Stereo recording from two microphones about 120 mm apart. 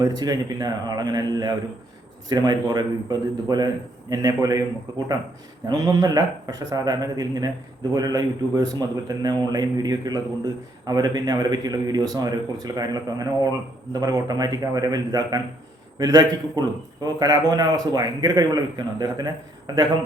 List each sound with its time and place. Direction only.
0.0 s a man's voice: 35° right (ahead or behind)
5.6 s a man's voice: 30° right (ahead or behind)